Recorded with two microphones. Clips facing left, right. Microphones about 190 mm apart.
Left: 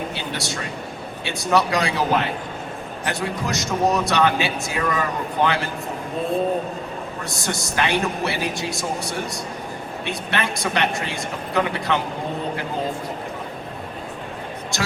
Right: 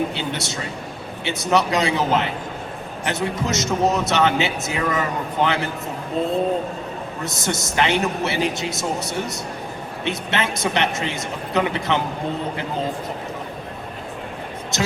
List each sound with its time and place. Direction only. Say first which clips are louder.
0.1 s a man's voice: right 1 dB; 20° right (ahead or behind)
7.3 s a man's voice: right 3 dB; 20° right (ahead or behind)